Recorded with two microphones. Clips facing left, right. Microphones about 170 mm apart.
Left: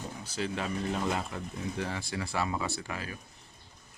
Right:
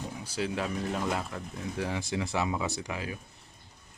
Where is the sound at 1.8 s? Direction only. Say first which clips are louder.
Right 6 dB; 15° right (ahead or behind).